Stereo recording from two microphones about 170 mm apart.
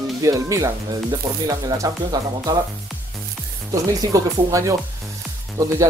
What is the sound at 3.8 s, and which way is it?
Speech, 20° right (ahead or behind).